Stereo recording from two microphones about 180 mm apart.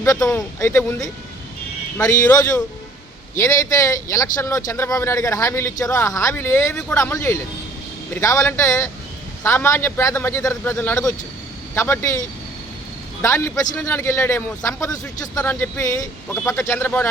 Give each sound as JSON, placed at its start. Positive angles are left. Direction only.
{"t": 0.0, "sound": "speech", "side_deg": 15}
{"t": 13.2, "sound": "speech", "side_deg": 15}